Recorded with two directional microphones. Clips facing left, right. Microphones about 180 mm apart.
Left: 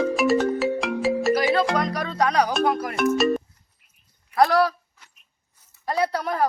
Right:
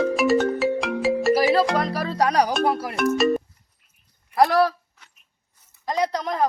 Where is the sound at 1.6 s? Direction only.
Centre (ahead or behind).